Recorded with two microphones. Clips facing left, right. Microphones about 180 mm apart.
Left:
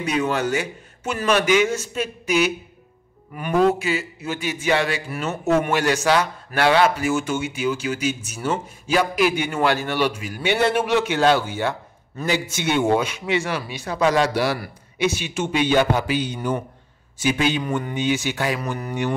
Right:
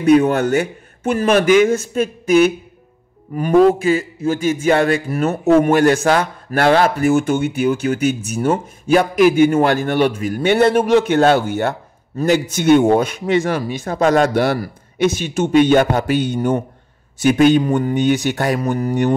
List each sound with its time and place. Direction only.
0.0 s speech: 55° right (ahead or behind)
3.3 s speech: 35° right (ahead or behind)
5.3 s speech: 35° right (ahead or behind)
5.7 s speech: 50° right (ahead or behind)